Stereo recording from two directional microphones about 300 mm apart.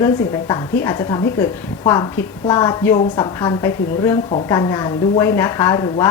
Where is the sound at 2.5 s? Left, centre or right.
Centre.